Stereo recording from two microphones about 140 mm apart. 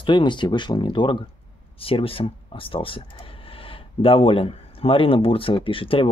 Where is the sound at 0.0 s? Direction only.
35° left (ahead or behind).